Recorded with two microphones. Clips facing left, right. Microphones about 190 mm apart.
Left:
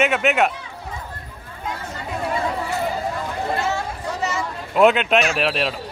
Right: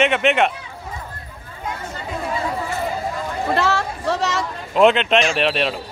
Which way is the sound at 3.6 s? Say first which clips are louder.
Right 4 dB; 80° right.